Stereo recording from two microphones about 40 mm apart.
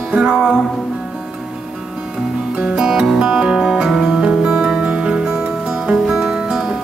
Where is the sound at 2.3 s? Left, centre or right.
Centre.